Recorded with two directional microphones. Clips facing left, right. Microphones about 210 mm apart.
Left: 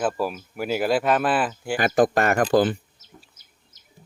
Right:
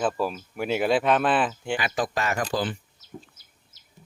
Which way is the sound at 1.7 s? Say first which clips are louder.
Left 10 dB; 50° left (ahead or behind).